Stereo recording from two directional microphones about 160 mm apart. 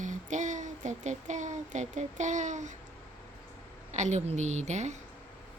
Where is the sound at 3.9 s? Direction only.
45° right (ahead or behind).